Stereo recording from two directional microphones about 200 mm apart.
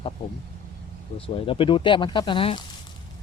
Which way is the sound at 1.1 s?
25° left (ahead or behind).